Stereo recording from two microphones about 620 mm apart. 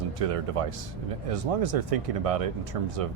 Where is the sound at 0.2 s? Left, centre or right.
Right.